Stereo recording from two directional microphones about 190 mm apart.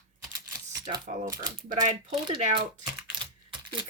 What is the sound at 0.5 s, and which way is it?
Typing, 20° right (ahead or behind).